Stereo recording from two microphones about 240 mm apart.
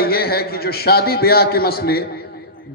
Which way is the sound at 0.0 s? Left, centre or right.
Left.